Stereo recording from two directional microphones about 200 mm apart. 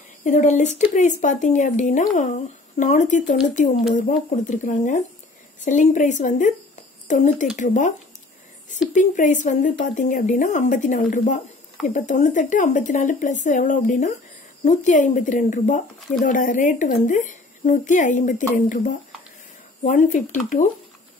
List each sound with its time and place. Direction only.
0.2 s speech: 35° left (ahead or behind)
8.9 s speech: 40° left (ahead or behind)